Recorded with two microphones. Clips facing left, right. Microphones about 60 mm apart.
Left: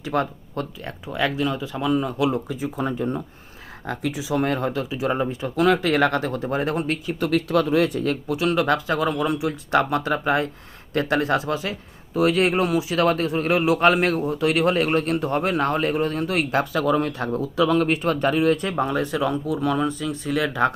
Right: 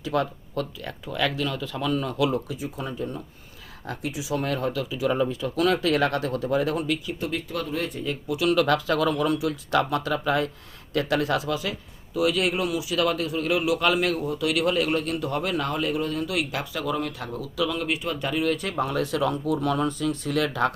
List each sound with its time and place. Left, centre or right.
0.0 s speech: left
2.7 s speech: left
3.8 s speech: left
7.2 s speech: left
8.3 s speech: left
8.5 s speech: left